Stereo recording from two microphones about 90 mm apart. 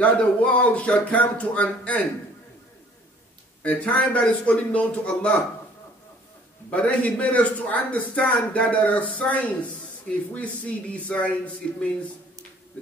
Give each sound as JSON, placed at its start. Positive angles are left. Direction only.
{"t": 0.0, "sound": "a man's voice", "side_deg": 15}
{"t": 3.6, "sound": "a man's voice", "side_deg": 15}
{"t": 6.7, "sound": "a man's voice", "side_deg": 15}